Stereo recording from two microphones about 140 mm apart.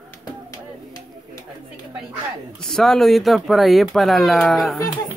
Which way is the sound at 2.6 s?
5° left (ahead or behind).